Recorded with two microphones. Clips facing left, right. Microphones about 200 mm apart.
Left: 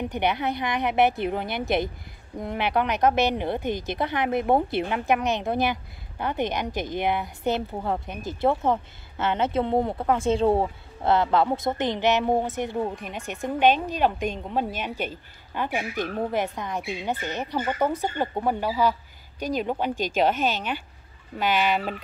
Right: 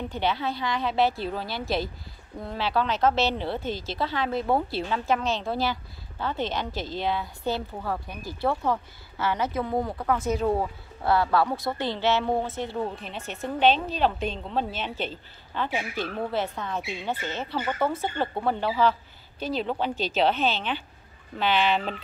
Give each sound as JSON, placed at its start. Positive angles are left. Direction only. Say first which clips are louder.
{"t": 0.1, "sound": "a woman's voice", "louder": "left 2 dB", "side_deg": 20}